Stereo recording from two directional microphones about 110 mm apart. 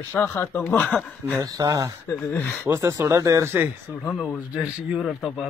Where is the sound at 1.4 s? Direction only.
35° right (ahead or behind).